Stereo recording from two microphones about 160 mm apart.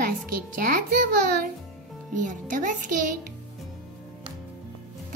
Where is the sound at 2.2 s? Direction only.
55° right (ahead or behind).